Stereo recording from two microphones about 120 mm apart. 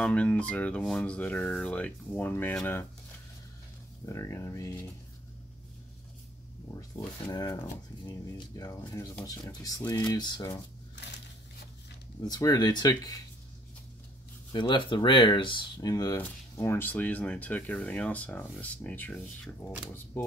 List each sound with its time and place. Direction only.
0.0 s speech: 10° left (ahead or behind)
4.0 s speech: 25° left (ahead or behind)
6.7 s speech: 25° left (ahead or behind)
12.2 s speech: 35° left (ahead or behind)
14.5 s speech: 40° left (ahead or behind)
16.2 s speech: 20° left (ahead or behind)